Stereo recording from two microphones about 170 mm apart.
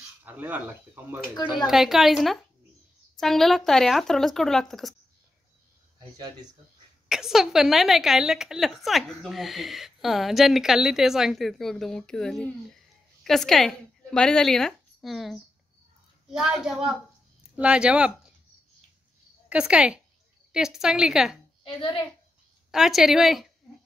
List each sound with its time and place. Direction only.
0.2 s a woman's voice: 10° right (ahead or behind)
5.9 s speech: 25° right (ahead or behind)
7.1 s a woman's voice: centre (ahead or behind)
19.5 s a woman's voice: 5° right (ahead or behind)
22.7 s a woman's voice: centre (ahead or behind)